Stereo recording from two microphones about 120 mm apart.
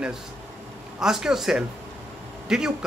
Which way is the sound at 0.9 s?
5° right (ahead or behind).